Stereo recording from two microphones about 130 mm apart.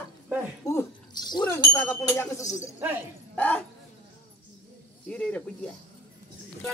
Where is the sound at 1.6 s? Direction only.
25° left (ahead or behind).